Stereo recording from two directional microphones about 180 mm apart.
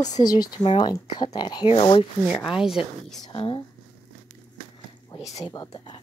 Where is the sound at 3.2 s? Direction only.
25° left (ahead or behind).